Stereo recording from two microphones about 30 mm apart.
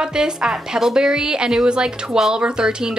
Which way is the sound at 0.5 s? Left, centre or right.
Centre.